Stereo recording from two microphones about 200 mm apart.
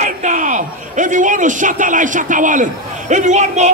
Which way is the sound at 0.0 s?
40° right (ahead or behind).